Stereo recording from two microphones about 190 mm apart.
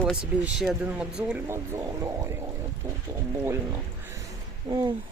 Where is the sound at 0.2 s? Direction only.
5° right (ahead or behind).